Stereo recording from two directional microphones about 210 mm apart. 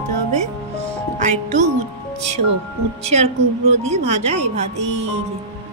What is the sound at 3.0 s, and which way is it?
Speech, 30° right (ahead or behind).